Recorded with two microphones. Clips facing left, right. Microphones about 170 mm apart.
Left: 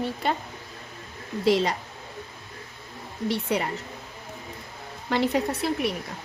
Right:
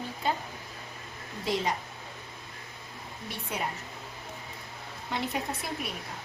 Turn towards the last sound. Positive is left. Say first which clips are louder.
# left 9 dB
turn(degrees=75)  # may be behind; listen again after turning